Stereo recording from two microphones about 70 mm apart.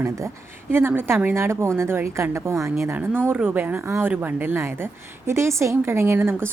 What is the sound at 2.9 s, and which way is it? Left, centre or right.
A woman's voice, right.